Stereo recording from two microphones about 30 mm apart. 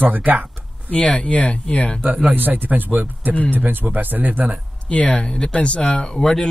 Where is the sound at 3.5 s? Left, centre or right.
Right.